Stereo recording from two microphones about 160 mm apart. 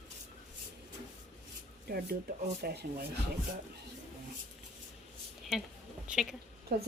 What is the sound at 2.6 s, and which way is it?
Speech, 90° right.